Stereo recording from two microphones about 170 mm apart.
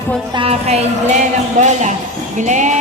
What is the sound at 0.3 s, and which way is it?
A woman's voice, 35° right (ahead or behind).